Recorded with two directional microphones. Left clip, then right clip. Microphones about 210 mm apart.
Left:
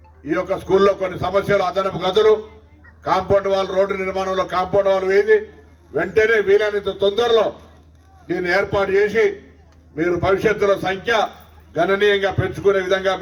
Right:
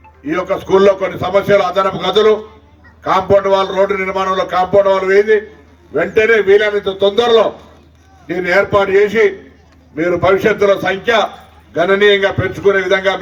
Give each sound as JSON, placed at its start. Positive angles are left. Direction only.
{"t": 0.5, "sound": "a man's voice", "side_deg": -50}